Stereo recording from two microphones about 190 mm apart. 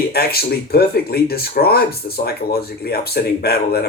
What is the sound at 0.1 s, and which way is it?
Speech, 55° left (ahead or behind).